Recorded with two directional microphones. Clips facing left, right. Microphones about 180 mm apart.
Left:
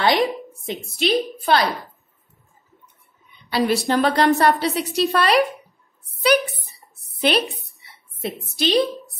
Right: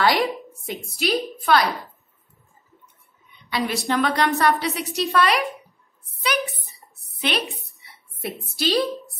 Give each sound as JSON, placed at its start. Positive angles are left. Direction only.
{"t": 0.0, "sound": "a sound", "side_deg": 25}
{"t": 0.9, "sound": "a woman's voice", "side_deg": 30}
{"t": 3.4, "sound": "a woman's voice", "side_deg": 35}
{"t": 7.2, "sound": "a woman's voice", "side_deg": 35}
{"t": 8.2, "sound": "a woman's voice", "side_deg": 20}